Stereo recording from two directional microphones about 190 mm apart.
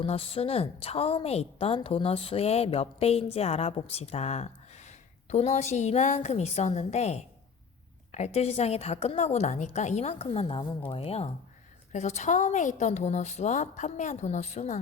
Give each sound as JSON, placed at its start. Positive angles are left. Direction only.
{"t": 0.0, "sound": "a woman's voice", "side_deg": 30}